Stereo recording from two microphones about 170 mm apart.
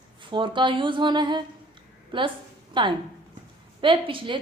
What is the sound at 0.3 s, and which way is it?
A woman's voice, 30° right (ahead or behind).